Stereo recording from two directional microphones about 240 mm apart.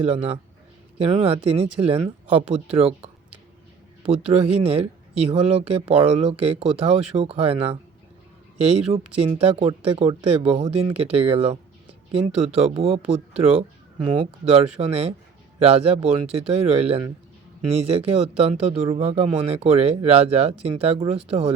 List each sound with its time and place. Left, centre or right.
0.0 s speech: right